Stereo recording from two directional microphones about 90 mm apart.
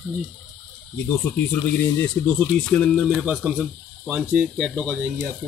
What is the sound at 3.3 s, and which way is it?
Speech, 10° right (ahead or behind).